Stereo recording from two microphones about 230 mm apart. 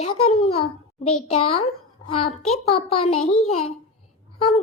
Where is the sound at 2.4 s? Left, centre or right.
Left.